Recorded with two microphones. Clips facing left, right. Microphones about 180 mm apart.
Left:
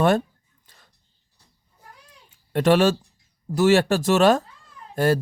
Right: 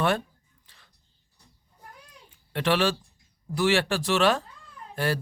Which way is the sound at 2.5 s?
45° left (ahead or behind).